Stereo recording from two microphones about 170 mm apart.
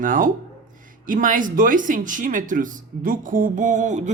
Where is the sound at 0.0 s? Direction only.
50° right (ahead or behind).